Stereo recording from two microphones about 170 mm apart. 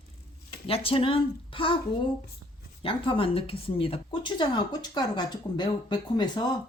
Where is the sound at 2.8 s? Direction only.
30° left (ahead or behind).